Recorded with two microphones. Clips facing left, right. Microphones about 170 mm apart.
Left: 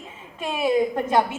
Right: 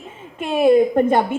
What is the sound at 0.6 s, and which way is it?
Speech, 55° right (ahead or behind).